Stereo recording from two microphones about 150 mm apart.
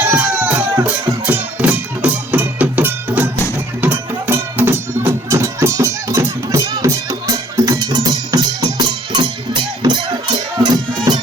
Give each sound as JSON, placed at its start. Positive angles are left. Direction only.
{"t": 0.0, "sound": "music", "side_deg": -10}
{"t": 11.1, "sound": "music", "side_deg": -25}